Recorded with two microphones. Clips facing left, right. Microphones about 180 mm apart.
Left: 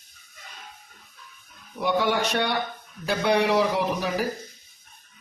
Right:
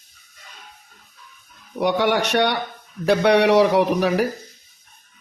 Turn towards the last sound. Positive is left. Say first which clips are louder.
# right 7 dB
turn(degrees=-70)  # may be behind; listen again after turning